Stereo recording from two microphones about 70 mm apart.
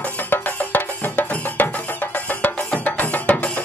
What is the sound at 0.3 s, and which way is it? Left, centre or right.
Music, left.